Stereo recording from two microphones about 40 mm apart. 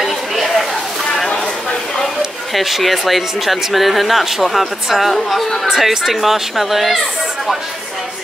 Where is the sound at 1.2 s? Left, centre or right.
Left.